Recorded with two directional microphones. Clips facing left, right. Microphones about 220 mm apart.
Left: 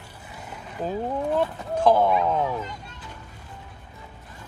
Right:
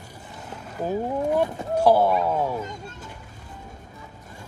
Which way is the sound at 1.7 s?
10° right (ahead or behind).